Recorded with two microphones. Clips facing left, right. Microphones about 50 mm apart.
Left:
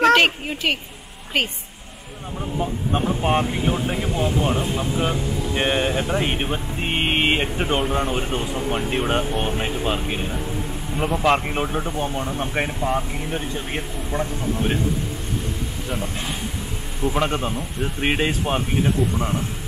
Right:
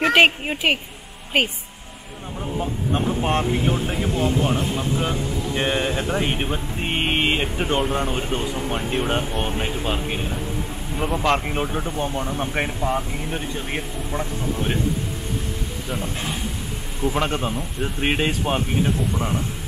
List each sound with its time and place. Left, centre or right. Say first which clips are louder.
0.0 s a woman's voice: even; centre
2.4 s speech: left 1 dB; centre
17.0 s speech: left 1 dB; centre